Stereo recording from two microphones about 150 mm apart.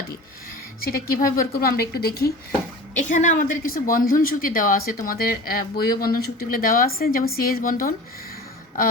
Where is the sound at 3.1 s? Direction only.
60° left (ahead or behind).